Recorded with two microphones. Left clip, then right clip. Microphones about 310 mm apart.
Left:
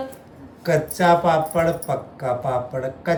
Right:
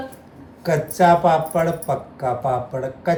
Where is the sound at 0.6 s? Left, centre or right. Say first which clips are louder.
Right 2 dB; centre.